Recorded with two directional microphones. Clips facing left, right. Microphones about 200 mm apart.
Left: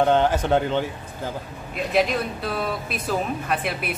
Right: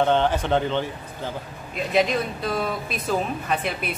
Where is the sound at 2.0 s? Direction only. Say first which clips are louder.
Even; 5° left (ahead or behind).